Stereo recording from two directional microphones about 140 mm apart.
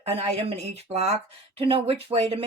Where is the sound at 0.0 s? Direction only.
45° right (ahead or behind).